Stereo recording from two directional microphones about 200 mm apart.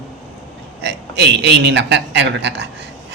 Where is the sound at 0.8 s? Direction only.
60° right (ahead or behind).